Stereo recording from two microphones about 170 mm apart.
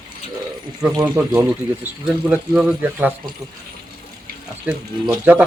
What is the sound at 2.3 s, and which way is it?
Speech, 5° right (ahead or behind).